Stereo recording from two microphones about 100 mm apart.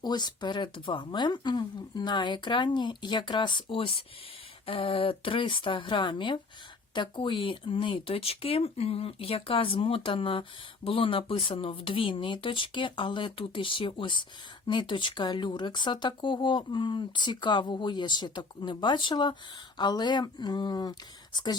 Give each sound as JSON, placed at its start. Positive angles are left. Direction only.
{"t": 0.0, "sound": "speech", "side_deg": 45}